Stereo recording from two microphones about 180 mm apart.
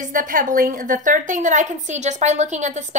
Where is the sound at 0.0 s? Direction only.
45° right (ahead or behind).